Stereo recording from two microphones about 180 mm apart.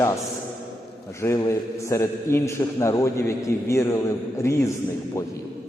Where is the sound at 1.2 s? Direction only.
15° left (ahead or behind).